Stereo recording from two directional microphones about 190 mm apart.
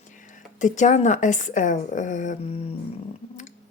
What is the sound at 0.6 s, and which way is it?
Speech, 40° left (ahead or behind).